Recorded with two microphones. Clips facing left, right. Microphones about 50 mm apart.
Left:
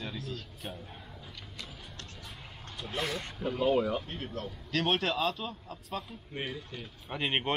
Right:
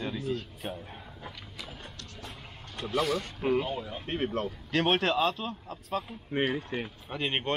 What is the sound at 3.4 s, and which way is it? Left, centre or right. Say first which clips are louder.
Speech: right 3 dB; right.